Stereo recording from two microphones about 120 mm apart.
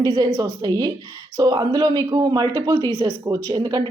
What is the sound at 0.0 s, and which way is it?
Speech, 35° right (ahead or behind).